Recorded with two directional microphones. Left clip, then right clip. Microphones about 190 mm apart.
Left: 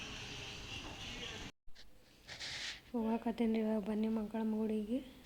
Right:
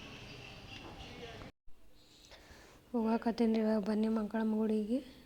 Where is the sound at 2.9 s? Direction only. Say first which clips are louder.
Right 6 dB; 35° right (ahead or behind).